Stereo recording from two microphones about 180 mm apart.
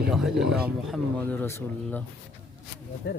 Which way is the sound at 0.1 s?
Centre (ahead or behind).